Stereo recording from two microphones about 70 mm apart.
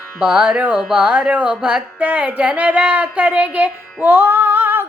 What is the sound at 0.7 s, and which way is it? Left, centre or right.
Carnatic music, centre.